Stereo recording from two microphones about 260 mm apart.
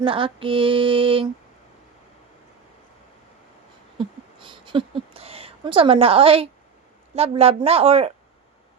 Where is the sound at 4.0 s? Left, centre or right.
Centre.